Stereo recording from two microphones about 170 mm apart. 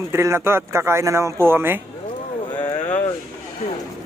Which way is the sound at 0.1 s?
15° right (ahead or behind).